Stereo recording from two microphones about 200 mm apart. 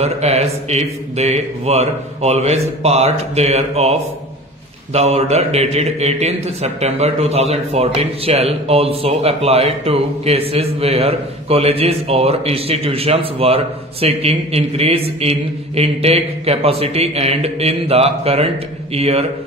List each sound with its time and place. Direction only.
0.0 s a man's voice: 35° right (ahead or behind)